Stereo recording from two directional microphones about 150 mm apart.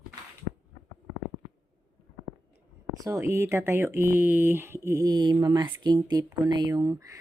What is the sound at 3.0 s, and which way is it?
Speech, 20° right (ahead or behind).